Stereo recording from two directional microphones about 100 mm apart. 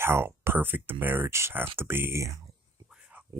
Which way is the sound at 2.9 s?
10° right (ahead or behind).